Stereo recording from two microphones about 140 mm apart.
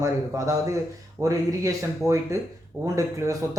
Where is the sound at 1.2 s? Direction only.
20° right (ahead or behind).